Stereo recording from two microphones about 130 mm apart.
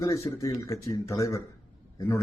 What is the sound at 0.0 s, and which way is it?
Speech, 25° left (ahead or behind).